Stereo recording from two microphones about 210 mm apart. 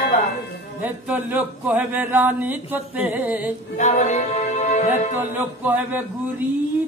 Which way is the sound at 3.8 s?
35° left (ahead or behind).